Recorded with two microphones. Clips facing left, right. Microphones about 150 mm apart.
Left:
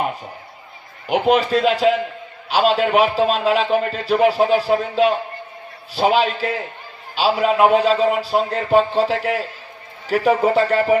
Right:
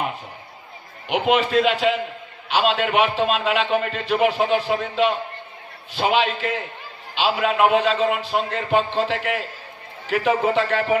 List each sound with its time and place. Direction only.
1.0 s a man's voice: 40° left (ahead or behind)